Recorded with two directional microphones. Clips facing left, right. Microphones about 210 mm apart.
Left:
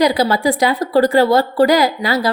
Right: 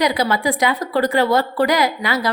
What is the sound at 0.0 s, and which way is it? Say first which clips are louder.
A woman's voice: left 4 dB; 35° left (ahead or behind).